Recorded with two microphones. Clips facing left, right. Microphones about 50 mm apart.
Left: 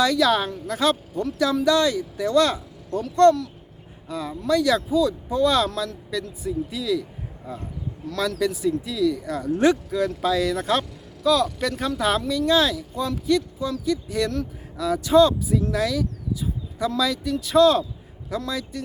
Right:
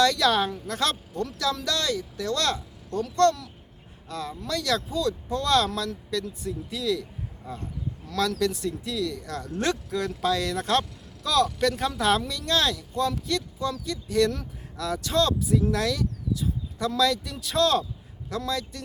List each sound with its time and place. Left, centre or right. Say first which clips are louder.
0.0 s speech: left 2 dB; centre